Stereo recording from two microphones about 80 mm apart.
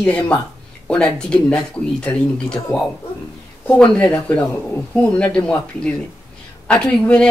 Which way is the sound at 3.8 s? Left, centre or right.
Centre.